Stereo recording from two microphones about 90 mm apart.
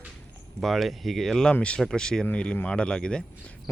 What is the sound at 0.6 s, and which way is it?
Speech, centre (ahead or behind).